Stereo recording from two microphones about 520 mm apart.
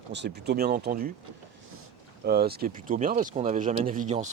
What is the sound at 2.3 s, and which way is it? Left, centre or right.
Speech, centre.